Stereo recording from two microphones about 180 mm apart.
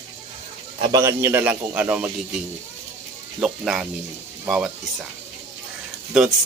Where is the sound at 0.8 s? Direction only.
20° right (ahead or behind).